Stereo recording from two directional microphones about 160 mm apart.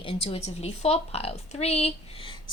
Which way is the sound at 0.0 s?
35° left (ahead or behind).